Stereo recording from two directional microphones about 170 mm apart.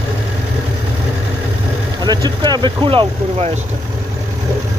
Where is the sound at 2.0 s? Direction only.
25° right (ahead or behind).